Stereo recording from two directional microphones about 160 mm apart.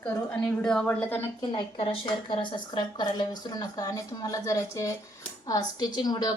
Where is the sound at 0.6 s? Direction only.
5° left (ahead or behind).